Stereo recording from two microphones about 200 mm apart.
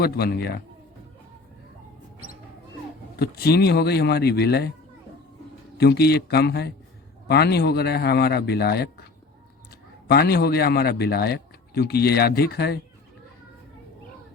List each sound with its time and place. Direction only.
0.0 s a man's voice: 50° left (ahead or behind)
3.2 s a man's voice: 50° left (ahead or behind)
5.7 s a man's voice: 55° left (ahead or behind)
10.1 s a man's voice: 50° left (ahead or behind)